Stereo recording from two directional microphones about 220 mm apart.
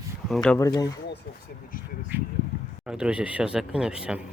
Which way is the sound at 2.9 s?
5° right (ahead or behind).